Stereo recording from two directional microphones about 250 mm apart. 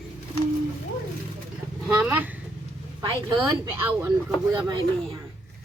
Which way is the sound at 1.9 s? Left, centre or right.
Centre.